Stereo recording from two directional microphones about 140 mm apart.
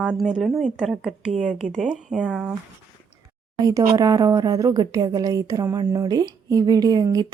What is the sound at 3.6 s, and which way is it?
A woman's voice, 25° right (ahead or behind).